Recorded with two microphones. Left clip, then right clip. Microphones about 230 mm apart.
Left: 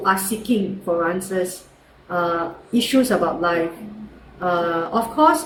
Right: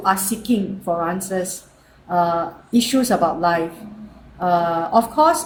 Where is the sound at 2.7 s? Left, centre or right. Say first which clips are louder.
Even; right.